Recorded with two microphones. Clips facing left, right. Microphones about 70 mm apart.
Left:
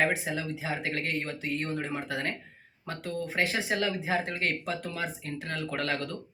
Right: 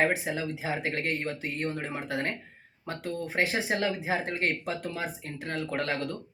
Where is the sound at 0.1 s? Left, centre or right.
Right.